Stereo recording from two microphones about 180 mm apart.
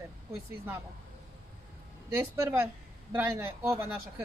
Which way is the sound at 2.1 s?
10° right (ahead or behind).